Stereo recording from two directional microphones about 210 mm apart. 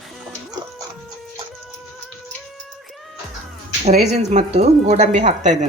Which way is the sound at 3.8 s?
35° right (ahead or behind).